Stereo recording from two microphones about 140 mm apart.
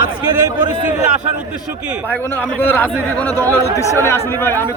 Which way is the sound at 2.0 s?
15° left (ahead or behind).